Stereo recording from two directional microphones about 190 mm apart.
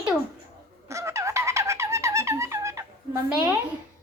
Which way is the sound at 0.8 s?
15° right (ahead or behind).